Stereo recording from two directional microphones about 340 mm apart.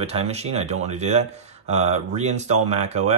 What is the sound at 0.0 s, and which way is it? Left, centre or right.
Speech, centre.